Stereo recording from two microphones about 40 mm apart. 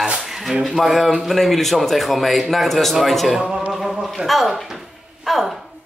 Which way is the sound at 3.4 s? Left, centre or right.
Right.